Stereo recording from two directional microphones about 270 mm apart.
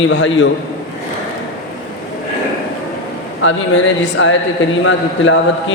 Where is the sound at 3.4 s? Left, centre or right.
Left.